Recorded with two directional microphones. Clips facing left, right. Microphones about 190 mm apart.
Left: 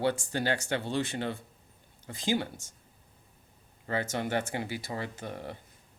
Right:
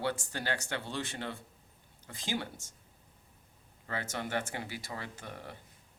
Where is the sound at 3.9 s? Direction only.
20° left (ahead or behind).